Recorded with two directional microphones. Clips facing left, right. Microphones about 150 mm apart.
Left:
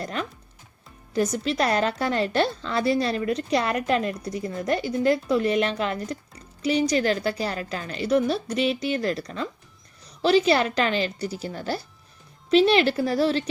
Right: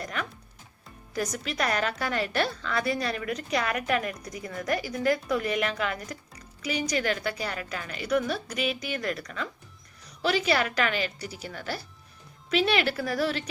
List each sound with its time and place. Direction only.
0.0 s a woman's voice: 30° left (ahead or behind)